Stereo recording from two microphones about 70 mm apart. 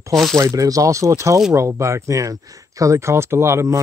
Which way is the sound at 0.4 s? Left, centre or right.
Right.